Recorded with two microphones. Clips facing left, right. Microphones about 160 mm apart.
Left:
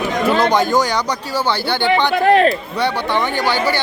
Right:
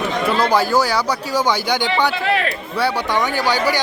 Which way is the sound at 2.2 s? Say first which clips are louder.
Left 8 dB; 45° left (ahead or behind).